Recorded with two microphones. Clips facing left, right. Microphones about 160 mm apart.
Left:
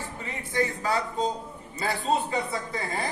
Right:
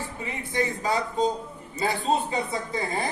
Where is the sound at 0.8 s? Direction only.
15° right (ahead or behind).